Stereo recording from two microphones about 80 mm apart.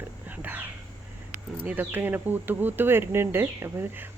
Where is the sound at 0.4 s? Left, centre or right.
Right.